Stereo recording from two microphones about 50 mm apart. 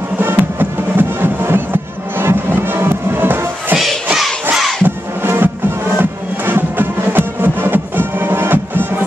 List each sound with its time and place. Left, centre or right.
0.2 s music: right
4.8 s music: right